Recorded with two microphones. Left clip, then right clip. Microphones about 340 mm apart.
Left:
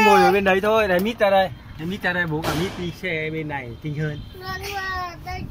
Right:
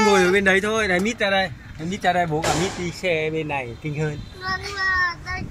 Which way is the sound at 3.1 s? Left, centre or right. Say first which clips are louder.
Right 3 dB; right.